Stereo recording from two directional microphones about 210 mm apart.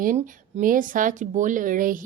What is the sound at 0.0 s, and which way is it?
A woman's voice, 35° right (ahead or behind).